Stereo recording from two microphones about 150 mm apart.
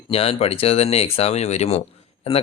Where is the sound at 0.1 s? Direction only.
40° left (ahead or behind).